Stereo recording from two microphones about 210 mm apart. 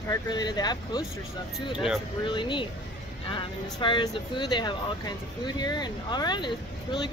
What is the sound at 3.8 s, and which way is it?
Speech, 20° left (ahead or behind).